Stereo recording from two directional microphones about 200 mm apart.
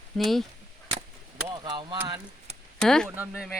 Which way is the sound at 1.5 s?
20° right (ahead or behind).